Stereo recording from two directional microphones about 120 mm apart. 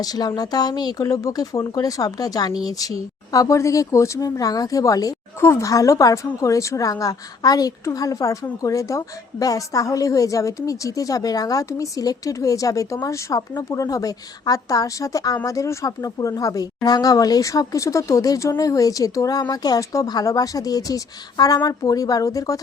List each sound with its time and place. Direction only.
0.0 s speech: 35° left (ahead or behind)